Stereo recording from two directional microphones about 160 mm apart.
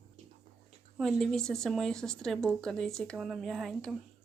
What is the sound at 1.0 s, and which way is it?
A woman's voice, centre (ahead or behind).